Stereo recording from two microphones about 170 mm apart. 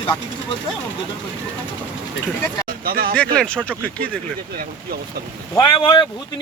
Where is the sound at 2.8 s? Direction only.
60° right (ahead or behind).